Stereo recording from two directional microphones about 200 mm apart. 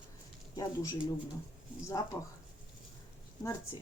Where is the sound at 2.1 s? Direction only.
20° left (ahead or behind).